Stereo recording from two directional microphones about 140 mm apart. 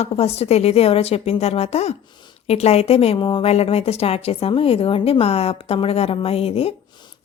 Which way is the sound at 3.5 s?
45° left (ahead or behind).